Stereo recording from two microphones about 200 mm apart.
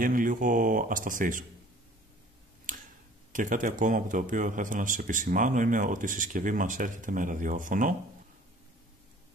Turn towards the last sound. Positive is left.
turn(degrees=-40)  # may be behind; listen again after turning